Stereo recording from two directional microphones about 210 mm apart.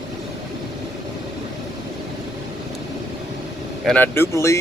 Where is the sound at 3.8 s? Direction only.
10° left (ahead or behind).